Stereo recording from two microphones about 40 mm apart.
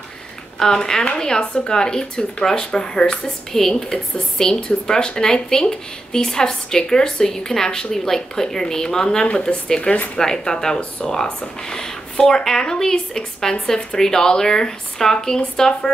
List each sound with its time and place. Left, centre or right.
0.6 s speech: centre
3.5 s speech: centre
9.3 s speech: left
10.1 s speech: centre